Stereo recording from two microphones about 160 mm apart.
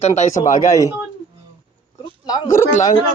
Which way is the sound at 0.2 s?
50° left (ahead or behind).